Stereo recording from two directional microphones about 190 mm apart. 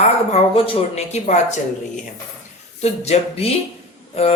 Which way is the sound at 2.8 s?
35° left (ahead or behind).